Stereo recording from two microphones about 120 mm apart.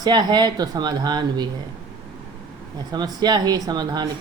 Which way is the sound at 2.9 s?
35° right (ahead or behind).